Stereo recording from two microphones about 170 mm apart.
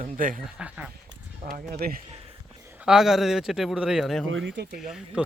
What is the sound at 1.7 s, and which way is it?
Speech, 60° right (ahead or behind).